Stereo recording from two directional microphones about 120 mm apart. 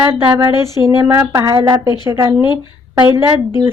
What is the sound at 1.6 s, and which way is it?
Speech, 20° right (ahead or behind).